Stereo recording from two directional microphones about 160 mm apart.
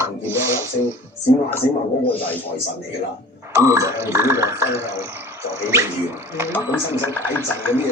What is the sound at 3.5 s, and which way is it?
Speech, 20° right (ahead or behind).